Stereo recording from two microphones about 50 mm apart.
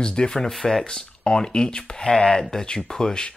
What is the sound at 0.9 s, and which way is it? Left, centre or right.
Speech, centre.